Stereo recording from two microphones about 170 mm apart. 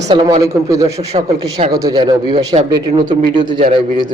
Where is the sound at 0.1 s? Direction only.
30° right (ahead or behind).